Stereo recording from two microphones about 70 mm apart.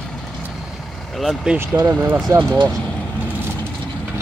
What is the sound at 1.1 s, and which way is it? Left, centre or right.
Speech, centre.